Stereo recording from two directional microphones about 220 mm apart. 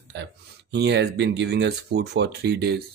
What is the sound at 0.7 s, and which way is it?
Speech, 50° right (ahead or behind).